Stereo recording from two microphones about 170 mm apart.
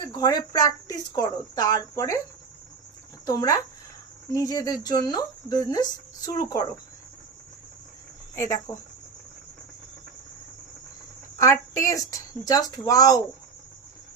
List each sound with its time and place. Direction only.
0.0 s speech: 20° left (ahead or behind)
3.2 s speech: 20° left (ahead or behind)
8.4 s speech: 20° left (ahead or behind)
11.3 s speech: 20° left (ahead or behind)